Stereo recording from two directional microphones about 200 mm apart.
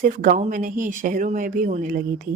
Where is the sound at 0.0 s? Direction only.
40° right (ahead or behind).